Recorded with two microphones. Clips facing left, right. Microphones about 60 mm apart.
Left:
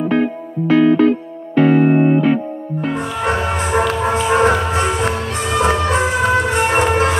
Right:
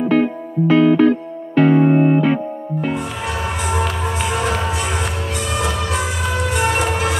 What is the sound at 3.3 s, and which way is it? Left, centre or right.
Music, left.